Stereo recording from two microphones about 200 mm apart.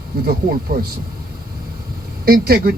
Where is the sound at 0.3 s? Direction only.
50° right (ahead or behind).